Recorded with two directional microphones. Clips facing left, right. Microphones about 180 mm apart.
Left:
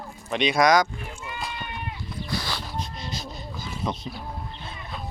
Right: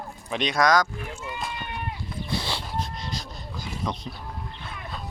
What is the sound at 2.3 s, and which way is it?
Music, 25° right (ahead or behind).